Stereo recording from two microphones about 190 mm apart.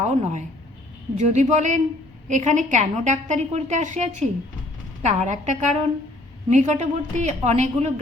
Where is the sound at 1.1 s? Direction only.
40° right (ahead or behind).